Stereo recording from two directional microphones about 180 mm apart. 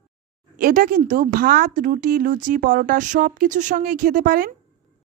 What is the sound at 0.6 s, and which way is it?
Speech, 50° right (ahead or behind).